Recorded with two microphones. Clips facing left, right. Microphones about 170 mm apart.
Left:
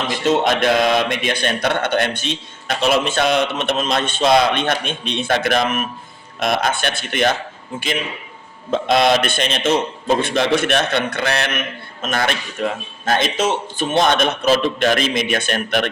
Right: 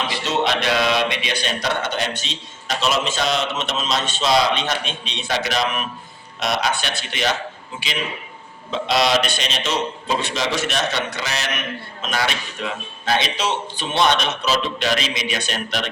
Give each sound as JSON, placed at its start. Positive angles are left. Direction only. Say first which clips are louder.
{"t": 0.1, "sound": "a man's voice", "louder": "left 8 dB", "side_deg": 50}
{"t": 8.7, "sound": "a man's voice", "louder": "left 4 dB", "side_deg": 50}